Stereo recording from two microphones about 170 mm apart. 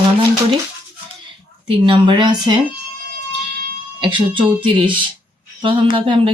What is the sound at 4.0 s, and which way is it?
Speech, 30° right (ahead or behind).